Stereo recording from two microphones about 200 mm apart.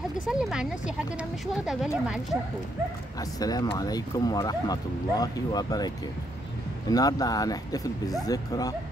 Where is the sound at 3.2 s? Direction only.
20° left (ahead or behind).